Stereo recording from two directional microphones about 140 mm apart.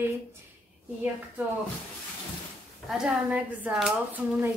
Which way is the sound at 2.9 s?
5° right (ahead or behind).